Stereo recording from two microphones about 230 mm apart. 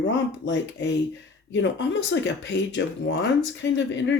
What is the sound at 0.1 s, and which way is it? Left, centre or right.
Speech, left.